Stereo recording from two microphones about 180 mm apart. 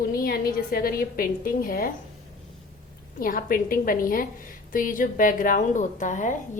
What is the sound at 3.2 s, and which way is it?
A woman's voice, 50° left (ahead or behind).